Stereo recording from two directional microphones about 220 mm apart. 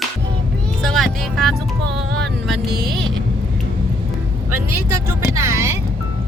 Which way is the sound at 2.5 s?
50° right (ahead or behind).